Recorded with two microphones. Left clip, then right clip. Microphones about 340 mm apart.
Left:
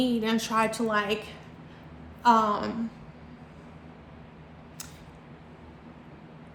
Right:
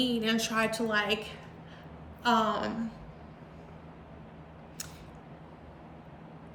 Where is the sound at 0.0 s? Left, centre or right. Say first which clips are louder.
Left 2 dB; centre.